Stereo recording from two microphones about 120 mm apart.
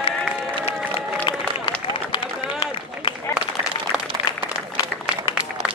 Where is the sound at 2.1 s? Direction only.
45° left (ahead or behind).